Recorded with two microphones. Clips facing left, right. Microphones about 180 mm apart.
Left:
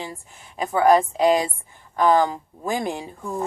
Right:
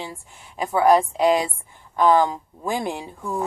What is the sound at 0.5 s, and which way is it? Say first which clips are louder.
Speech: even; 45° left (ahead or behind).